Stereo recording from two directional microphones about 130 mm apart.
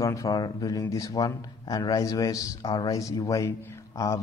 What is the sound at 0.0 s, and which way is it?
Speech, 25° left (ahead or behind).